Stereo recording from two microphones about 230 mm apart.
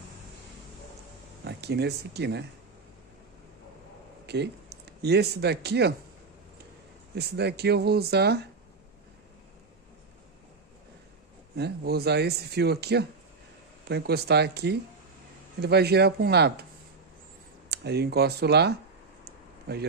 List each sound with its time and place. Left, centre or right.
1.4 s speech: right
4.3 s speech: right
7.2 s speech: right
11.5 s speech: right
17.6 s speech: right